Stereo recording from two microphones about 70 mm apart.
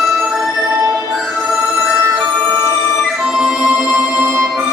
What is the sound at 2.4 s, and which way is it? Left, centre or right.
Music, right.